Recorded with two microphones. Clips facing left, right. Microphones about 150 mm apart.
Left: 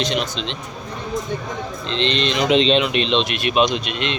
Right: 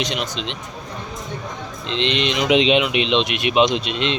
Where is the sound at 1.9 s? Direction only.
15° right (ahead or behind).